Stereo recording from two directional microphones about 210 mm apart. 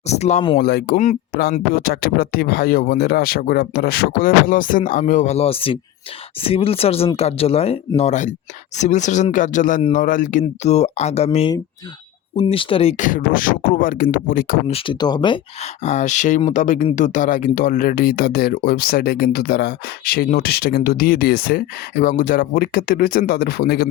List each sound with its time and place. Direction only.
0.1 s speech: 30° left (ahead or behind)
0.6 s speech: 50° left (ahead or behind)
14.7 s speech: 20° left (ahead or behind)
15.8 s speech: 35° left (ahead or behind)